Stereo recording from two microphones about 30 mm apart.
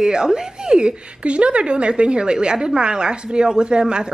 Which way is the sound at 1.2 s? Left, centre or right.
Right.